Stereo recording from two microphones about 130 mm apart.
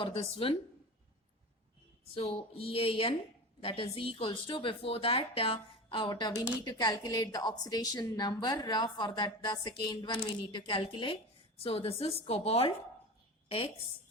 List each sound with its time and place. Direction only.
0.0 s a woman's voice: 45° left (ahead or behind)
2.1 s a woman's voice: 50° left (ahead or behind)